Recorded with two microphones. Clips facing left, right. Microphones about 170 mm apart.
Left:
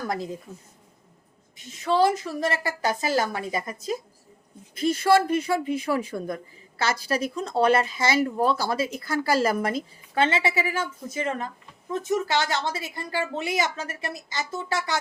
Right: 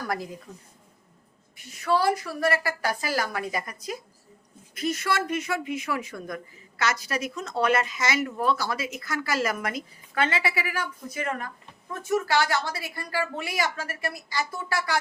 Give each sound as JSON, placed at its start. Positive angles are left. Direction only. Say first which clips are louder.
{"t": 0.1, "sound": "speech", "louder": "even", "side_deg": 25}
{"t": 1.5, "sound": "speech", "louder": "left 2 dB", "side_deg": 20}